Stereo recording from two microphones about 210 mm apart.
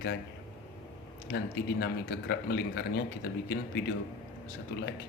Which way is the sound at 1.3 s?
50° left (ahead or behind).